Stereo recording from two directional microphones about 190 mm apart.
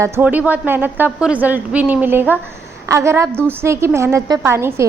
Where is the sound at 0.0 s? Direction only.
10° right (ahead or behind).